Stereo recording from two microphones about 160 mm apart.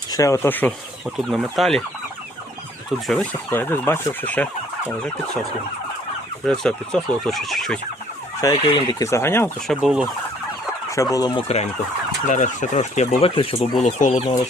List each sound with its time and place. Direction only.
0.1 s speech: 20° left (ahead or behind)
1.3 s speech: centre (ahead or behind)
3.1 s speech: 10° left (ahead or behind)
6.4 s speech: 5° left (ahead or behind)
8.4 s speech: 25° left (ahead or behind)
9.6 s speech: 5° right (ahead or behind)
10.9 s speech: 20° left (ahead or behind)
11.4 s speech: 40° left (ahead or behind)
13.8 s speech: 50° left (ahead or behind)